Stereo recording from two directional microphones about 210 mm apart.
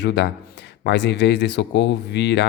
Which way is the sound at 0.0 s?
55° left (ahead or behind).